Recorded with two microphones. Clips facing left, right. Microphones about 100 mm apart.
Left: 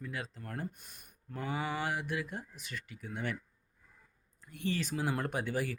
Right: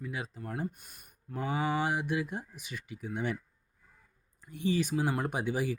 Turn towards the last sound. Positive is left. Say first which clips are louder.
# right 3 dB
turn(degrees=-15)  # may be behind; listen again after turning